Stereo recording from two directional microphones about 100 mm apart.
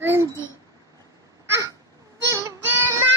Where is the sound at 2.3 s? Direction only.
35° right (ahead or behind).